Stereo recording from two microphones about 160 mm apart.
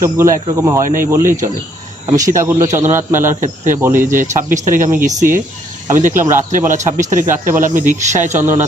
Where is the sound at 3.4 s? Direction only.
55° right (ahead or behind).